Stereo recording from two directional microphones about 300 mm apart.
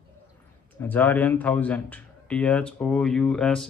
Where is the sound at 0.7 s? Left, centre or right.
Centre.